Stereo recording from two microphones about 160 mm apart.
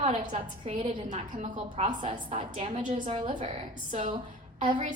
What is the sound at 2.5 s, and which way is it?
A woman's voice, 35° right (ahead or behind).